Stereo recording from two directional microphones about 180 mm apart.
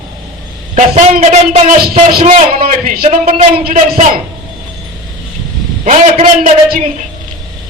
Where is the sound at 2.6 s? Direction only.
50° right (ahead or behind).